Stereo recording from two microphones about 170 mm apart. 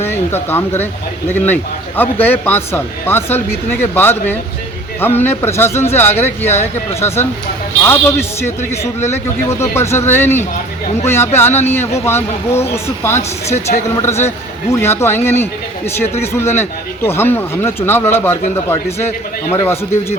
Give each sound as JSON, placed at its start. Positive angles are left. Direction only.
{"t": 0.0, "sound": "speech", "side_deg": 15}
{"t": 2.0, "sound": "speech", "side_deg": 10}
{"t": 7.9, "sound": "speech", "side_deg": 15}
{"t": 13.5, "sound": "speech", "side_deg": 40}
{"t": 14.3, "sound": "speech", "side_deg": 15}